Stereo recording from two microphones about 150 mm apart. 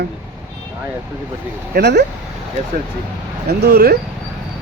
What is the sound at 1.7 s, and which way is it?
Speech, 90° right.